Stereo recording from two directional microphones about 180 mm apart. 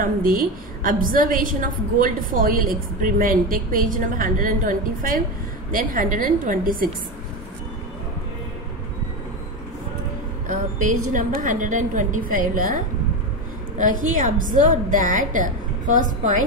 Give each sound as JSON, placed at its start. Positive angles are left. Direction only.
{"t": 0.0, "sound": "a woman's voice", "side_deg": -50}
{"t": 10.5, "sound": "a woman's voice", "side_deg": -45}